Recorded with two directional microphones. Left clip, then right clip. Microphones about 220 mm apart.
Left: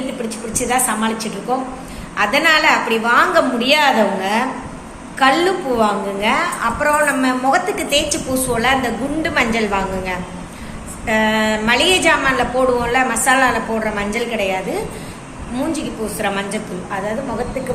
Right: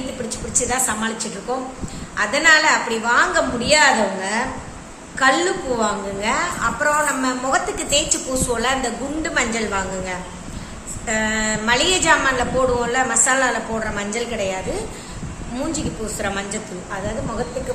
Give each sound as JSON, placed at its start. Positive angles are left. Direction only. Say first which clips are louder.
{"t": 0.3, "sound": "a woman's voice", "louder": "left 2 dB", "side_deg": -20}
{"t": 15.7, "sound": "a woman's voice", "louder": "left 3 dB", "side_deg": -20}